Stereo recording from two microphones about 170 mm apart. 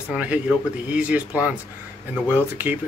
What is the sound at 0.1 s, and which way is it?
Speech, 5° right (ahead or behind).